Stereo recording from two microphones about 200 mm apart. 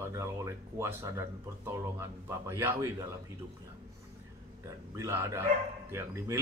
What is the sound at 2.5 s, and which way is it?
Speech, 15° right (ahead or behind).